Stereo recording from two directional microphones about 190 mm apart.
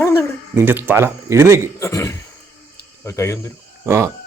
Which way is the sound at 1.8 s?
15° left (ahead or behind).